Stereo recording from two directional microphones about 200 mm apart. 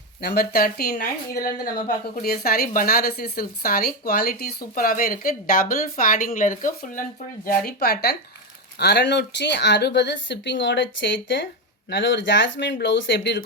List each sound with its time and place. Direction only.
0.2 s a woman's voice: 50° left (ahead or behind)